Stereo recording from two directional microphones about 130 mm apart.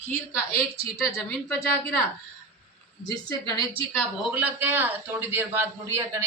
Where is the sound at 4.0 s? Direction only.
10° right (ahead or behind).